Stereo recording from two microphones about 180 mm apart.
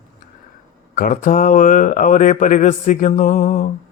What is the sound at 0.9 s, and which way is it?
Mantra, 45° left (ahead or behind).